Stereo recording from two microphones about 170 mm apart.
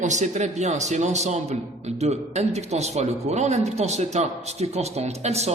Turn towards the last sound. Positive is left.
turn(degrees=-40)  # may be behind; listen again after turning